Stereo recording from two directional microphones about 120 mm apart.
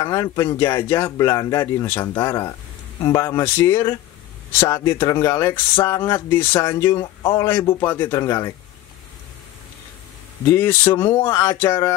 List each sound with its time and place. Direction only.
0.0 s speech: 25° left (ahead or behind)
10.5 s speech: 15° left (ahead or behind)